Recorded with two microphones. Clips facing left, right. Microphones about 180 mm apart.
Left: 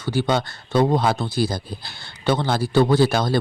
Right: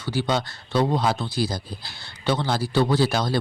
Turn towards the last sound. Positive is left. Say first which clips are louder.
# left 4 dB
turn(degrees=55)  # may be behind; listen again after turning